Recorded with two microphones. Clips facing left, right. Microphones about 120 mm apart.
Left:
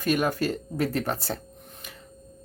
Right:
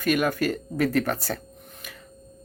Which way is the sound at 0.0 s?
30° left (ahead or behind).